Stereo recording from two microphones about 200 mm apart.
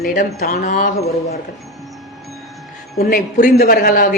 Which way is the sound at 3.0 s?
45° left (ahead or behind).